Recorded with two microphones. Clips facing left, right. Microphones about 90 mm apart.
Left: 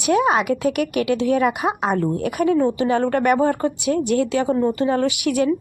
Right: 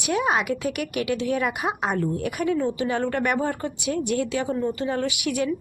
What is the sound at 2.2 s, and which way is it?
Speech, 50° left (ahead or behind).